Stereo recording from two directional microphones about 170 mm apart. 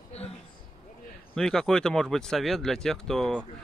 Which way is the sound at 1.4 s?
5° left (ahead or behind).